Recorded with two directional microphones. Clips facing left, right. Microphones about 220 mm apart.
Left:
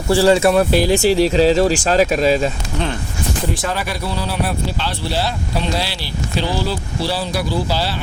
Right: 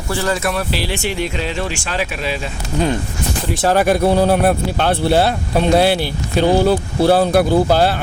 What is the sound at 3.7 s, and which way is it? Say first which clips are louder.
Speech: right 10 dB; 50° right (ahead or behind).